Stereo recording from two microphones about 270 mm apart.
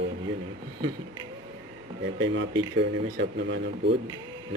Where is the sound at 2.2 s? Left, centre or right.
Right.